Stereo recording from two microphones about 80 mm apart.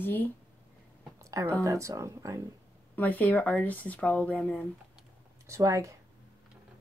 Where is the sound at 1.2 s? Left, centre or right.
Right.